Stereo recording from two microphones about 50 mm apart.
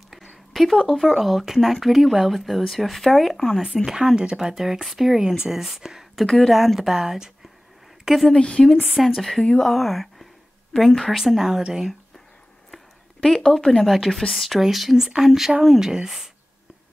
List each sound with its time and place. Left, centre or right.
0.8 s speech: centre
3.8 s speech: centre
6.2 s speech: centre
8.3 s a woman's voice: centre
9.1 s speech: centre
12.7 s a sound: centre
13.8 s speech: centre